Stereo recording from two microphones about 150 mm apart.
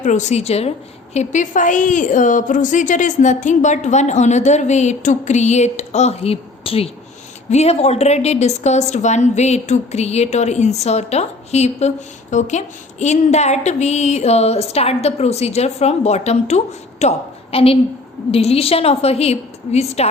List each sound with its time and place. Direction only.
0.0 s a woman's voice: 55° left (ahead or behind)